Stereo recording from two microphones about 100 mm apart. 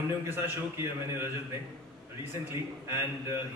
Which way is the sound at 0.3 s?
25° right (ahead or behind).